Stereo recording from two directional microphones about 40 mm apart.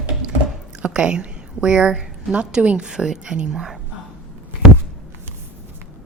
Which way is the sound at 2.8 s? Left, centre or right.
Centre.